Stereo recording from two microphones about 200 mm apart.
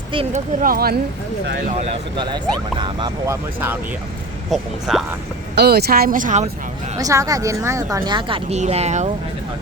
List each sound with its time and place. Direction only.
0.1 s speech: 25° right (ahead or behind)
0.6 s speech: 50° right (ahead or behind)
2.1 s speech: 25° right (ahead or behind)
4.5 s speech: centre (ahead or behind)
5.5 s speech: 55° right (ahead or behind)
7.0 s speech: 15° right (ahead or behind); by 9.0 s 35° right (ahead or behind)